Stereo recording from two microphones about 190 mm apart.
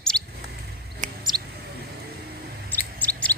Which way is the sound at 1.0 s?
40° right (ahead or behind).